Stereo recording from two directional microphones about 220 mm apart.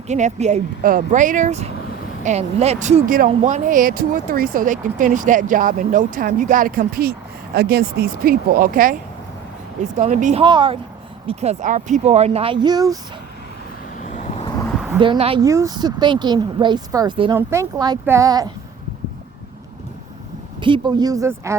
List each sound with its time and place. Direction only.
0.1 s speech: 30° right (ahead or behind)
10.0 s speech: 35° right (ahead or behind)
10.4 s speech: 20° right (ahead or behind)
14.0 s vehicle: 30° left (ahead or behind)
14.9 s speech: 20° right (ahead or behind)
20.6 s speech: 20° right (ahead or behind)